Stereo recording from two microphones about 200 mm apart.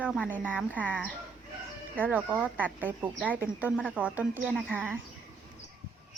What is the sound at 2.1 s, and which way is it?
Speech, 5° right (ahead or behind).